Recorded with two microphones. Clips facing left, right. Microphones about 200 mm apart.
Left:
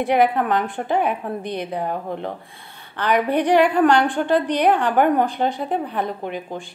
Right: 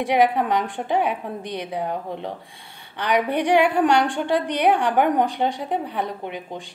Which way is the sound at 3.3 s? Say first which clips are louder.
Left 2 dB; 10° right (ahead or behind).